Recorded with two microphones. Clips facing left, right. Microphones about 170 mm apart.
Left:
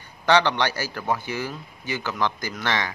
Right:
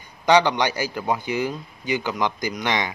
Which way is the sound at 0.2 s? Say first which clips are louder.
Right 2 dB; 15° right (ahead or behind).